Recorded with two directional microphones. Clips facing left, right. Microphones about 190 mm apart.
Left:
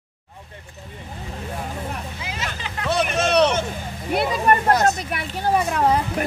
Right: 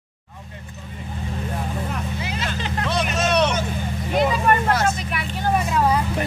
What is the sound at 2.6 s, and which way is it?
Vehicle, 35° right (ahead or behind).